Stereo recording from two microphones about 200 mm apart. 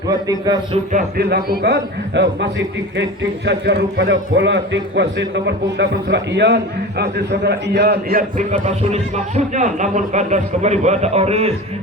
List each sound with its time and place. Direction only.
0.1 s a man's voice: 20° right (ahead or behind)
0.9 s a man's voice: 50° right (ahead or behind); by 11.5 s 30° right (ahead or behind)